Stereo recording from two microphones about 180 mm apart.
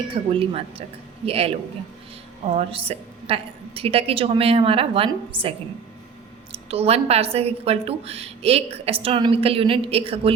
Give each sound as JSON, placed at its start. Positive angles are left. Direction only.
{"t": 0.1, "sound": "a woman's voice", "side_deg": -30}
{"t": 6.5, "sound": "a woman's voice", "side_deg": -35}